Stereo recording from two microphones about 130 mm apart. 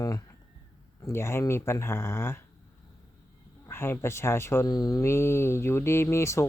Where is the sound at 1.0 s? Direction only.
20° left (ahead or behind).